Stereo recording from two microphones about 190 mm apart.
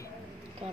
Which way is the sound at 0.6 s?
30° right (ahead or behind).